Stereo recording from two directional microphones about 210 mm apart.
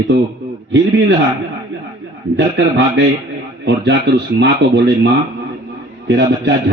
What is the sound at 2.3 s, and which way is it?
Speech, 55° right (ahead or behind).